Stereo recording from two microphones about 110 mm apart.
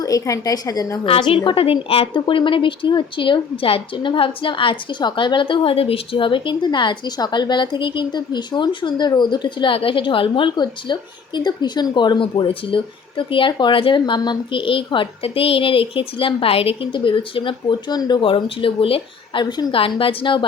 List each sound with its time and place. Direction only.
0.0 s a woman's voice: 30° left (ahead or behind)
1.3 s speech: 50° left (ahead or behind)
19.8 s speech: 55° left (ahead or behind)